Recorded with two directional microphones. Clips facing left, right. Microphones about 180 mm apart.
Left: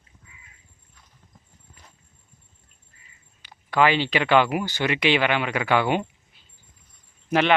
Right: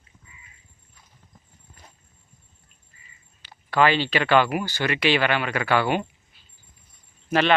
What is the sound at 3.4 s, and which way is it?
Speech, 15° left (ahead or behind).